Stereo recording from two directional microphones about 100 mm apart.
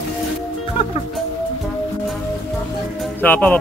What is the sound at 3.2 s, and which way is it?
Speech, 15° left (ahead or behind).